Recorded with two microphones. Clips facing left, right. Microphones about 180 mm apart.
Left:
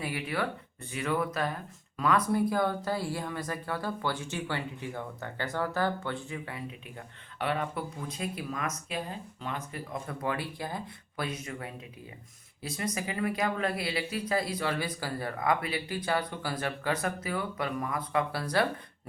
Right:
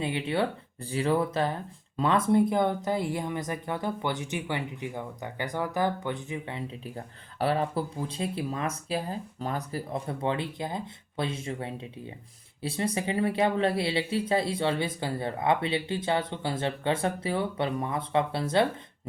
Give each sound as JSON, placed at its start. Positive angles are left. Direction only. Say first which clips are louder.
{"t": 0.0, "sound": "speech", "louder": "right 5 dB", "side_deg": -25}